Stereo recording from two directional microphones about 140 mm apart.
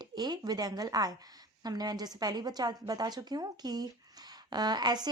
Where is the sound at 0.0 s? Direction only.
30° right (ahead or behind).